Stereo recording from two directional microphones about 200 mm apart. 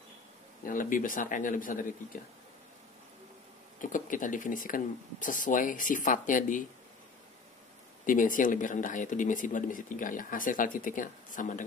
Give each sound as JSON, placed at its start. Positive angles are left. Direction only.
{"t": 0.7, "sound": "speech", "side_deg": 40}
{"t": 3.8, "sound": "speech", "side_deg": 40}
{"t": 8.1, "sound": "speech", "side_deg": 40}